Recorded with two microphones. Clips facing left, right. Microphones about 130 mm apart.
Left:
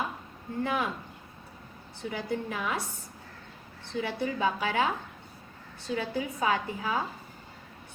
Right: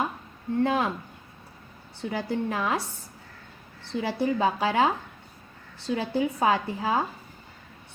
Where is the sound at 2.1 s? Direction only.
60° right (ahead or behind).